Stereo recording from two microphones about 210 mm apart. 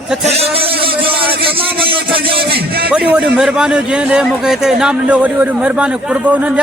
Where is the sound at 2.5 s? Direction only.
50° right (ahead or behind).